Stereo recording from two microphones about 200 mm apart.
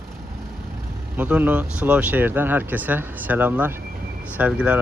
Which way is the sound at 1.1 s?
10° right (ahead or behind).